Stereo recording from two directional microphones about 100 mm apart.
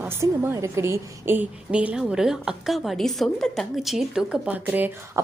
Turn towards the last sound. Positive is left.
turn(degrees=-20)  # may be behind; listen again after turning